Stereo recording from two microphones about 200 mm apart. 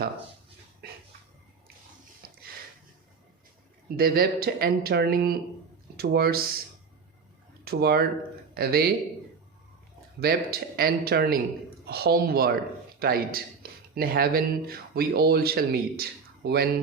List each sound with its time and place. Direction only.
2.2 s a sound: 50° right (ahead or behind)
3.9 s speech: 50° right (ahead or behind)
7.6 s speech: 50° right (ahead or behind)
10.2 s speech: 50° right (ahead or behind)